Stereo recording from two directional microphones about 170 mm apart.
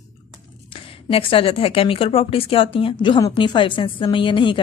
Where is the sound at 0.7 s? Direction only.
30° left (ahead or behind).